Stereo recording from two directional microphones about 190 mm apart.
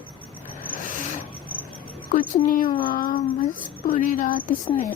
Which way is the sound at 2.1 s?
45° left (ahead or behind).